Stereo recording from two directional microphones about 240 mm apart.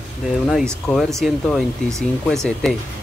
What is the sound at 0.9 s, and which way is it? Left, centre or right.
Speech, centre.